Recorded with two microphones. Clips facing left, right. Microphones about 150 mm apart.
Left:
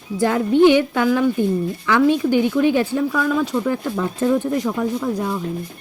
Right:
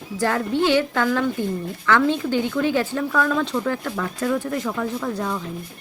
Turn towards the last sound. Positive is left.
turn(degrees=15)  # may be behind; listen again after turning